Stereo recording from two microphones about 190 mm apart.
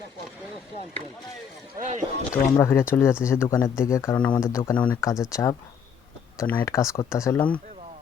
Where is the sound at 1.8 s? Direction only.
40° right (ahead or behind).